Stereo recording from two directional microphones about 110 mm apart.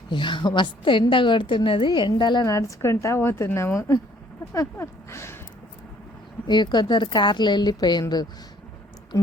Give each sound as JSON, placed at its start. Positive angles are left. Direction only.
{"t": 0.1, "sound": "a woman's voice", "side_deg": 45}
{"t": 2.4, "sound": "a woman's voice", "side_deg": 30}
{"t": 6.5, "sound": "a woman's voice", "side_deg": 45}